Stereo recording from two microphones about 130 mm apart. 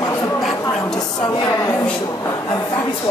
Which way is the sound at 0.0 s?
25° left (ahead or behind).